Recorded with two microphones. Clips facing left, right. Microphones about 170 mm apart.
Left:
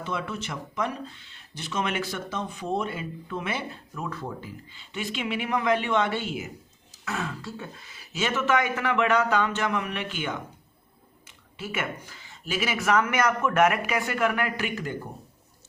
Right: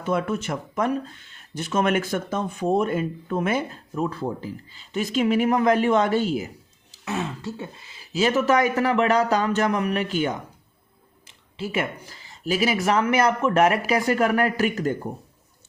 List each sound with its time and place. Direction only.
0.0 s speech: 50° right (ahead or behind)
3.9 s speech: 30° right (ahead or behind)
7.0 s speech: 25° right (ahead or behind); by 14.9 s 40° right (ahead or behind)